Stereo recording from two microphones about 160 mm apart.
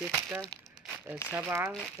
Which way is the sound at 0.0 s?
5° right (ahead or behind).